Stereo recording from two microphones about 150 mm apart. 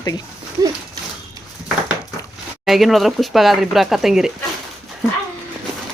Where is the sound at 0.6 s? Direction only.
25° right (ahead or behind).